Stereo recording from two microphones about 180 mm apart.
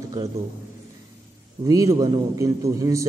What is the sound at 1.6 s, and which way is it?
A man's voice, 20° right (ahead or behind).